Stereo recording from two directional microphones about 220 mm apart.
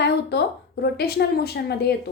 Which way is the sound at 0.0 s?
50° left (ahead or behind).